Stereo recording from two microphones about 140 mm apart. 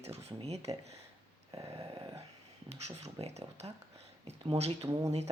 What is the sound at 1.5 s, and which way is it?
Dog, 35° right (ahead or behind).